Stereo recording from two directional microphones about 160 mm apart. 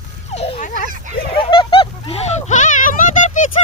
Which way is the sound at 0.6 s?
55° left (ahead or behind).